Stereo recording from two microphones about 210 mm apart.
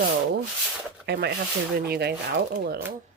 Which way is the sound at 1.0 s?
50° right (ahead or behind).